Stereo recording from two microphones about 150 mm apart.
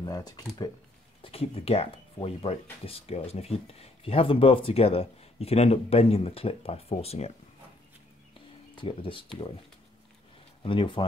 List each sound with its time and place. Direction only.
0.0 s speech: 25° left (ahead or behind)
1.2 s speech: 40° left (ahead or behind)
8.7 s speech: 35° left (ahead or behind)
10.6 s speech: 35° left (ahead or behind)